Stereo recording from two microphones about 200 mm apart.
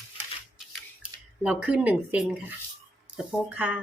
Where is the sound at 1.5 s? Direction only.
5° right (ahead or behind).